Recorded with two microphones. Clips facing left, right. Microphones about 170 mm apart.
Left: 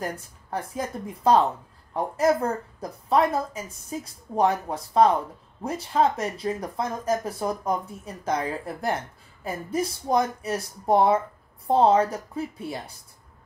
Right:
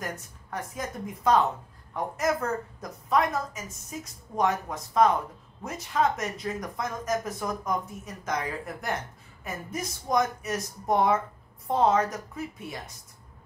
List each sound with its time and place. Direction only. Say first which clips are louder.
0.0 s speech: left 4 dB; 30° left (ahead or behind)